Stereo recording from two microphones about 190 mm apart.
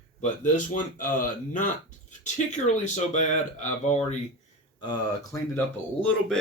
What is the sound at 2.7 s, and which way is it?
Speech, 40° left (ahead or behind).